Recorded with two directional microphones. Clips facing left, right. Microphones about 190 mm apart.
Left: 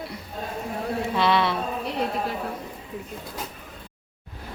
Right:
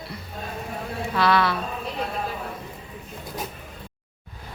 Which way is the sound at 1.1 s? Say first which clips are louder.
Right 2 dB; 25° left (ahead or behind).